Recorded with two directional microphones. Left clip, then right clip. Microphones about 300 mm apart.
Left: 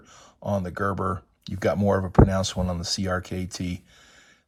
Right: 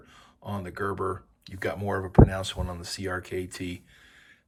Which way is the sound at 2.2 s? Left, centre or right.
Right.